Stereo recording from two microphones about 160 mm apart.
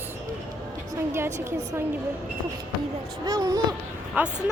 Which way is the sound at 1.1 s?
15° right (ahead or behind).